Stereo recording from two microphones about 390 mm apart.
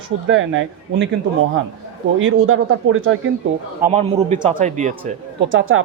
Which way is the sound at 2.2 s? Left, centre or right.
Right.